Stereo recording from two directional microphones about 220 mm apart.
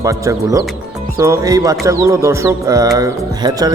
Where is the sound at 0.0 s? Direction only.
15° right (ahead or behind).